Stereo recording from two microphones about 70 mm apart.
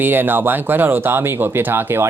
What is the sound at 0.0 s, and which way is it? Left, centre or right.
Speech, right.